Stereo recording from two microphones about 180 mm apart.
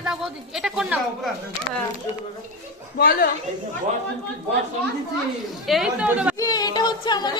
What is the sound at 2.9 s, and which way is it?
Speech, 60° left (ahead or behind).